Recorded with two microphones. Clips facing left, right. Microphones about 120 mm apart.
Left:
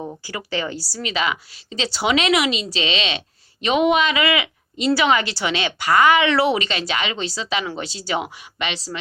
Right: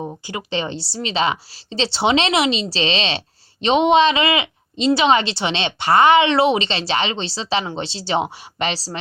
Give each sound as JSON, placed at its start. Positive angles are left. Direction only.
{"t": 0.0, "sound": "a woman's voice", "side_deg": -20}